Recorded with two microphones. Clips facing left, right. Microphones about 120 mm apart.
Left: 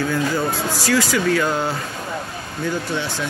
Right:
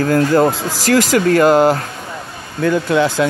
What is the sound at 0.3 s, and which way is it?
Speech, 90° right.